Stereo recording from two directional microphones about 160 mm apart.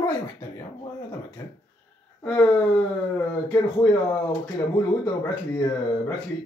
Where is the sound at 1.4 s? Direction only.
20° left (ahead or behind).